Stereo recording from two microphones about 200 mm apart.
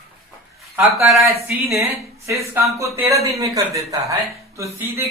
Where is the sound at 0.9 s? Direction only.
15° right (ahead or behind).